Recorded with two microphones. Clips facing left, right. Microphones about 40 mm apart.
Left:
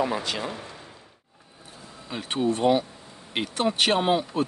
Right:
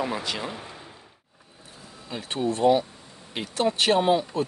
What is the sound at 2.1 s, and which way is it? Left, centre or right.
Speech, centre.